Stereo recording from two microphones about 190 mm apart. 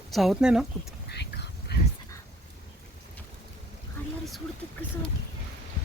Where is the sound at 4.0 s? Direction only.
10° left (ahead or behind).